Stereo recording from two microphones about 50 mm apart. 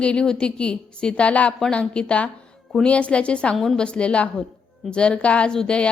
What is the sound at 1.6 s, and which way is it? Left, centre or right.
A woman's voice, centre.